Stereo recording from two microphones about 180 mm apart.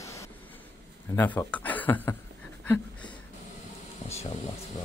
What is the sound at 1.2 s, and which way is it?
Speech, 10° left (ahead or behind).